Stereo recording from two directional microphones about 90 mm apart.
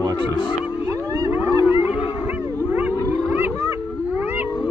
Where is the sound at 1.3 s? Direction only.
20° right (ahead or behind).